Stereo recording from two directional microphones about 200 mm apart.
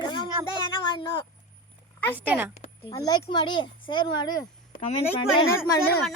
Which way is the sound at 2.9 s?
20° left (ahead or behind).